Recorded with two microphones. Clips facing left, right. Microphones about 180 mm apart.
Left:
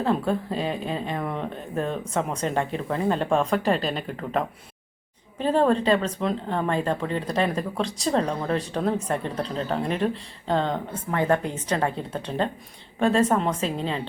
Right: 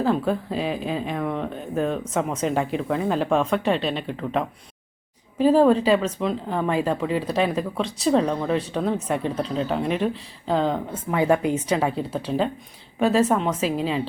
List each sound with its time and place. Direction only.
0.0 s speech: centre (ahead or behind)